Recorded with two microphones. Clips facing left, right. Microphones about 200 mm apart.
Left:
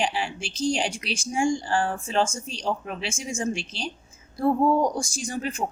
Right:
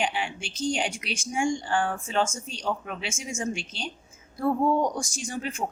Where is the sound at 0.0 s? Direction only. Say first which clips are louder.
Left 2 dB; 35° left (ahead or behind).